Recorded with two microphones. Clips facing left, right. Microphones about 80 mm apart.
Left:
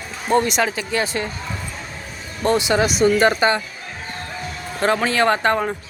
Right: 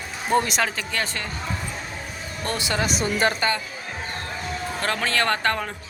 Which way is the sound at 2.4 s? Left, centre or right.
Left.